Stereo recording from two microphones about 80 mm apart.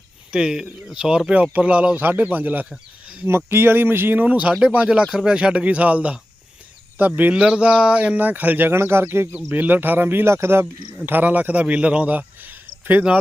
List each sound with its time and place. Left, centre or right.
0.3 s speech: centre
2.6 s a sound: centre
3.2 s speech: right
7.2 s a man's voice: centre